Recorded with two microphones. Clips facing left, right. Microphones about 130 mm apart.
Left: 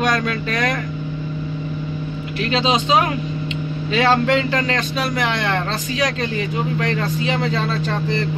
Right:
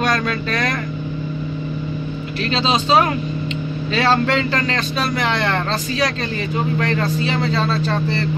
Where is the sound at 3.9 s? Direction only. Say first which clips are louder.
Left 1 dB; 15° left (ahead or behind).